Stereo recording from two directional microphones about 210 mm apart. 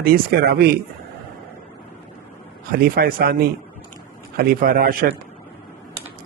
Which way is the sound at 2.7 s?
45° right (ahead or behind).